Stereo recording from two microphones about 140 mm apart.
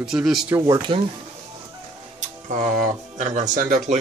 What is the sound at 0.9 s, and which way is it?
Speech, 35° right (ahead or behind).